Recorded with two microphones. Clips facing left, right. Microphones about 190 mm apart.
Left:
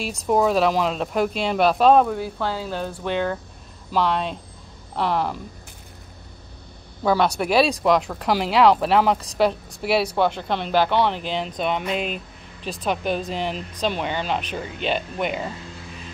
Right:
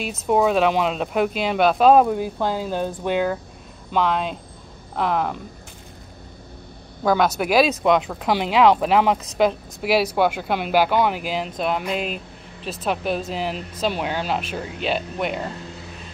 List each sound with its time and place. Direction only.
0.0 s speech: centre (ahead or behind)
2.0 s speech: 15° right (ahead or behind)
3.9 s speech: centre (ahead or behind)
7.0 s speech: 5° right (ahead or behind)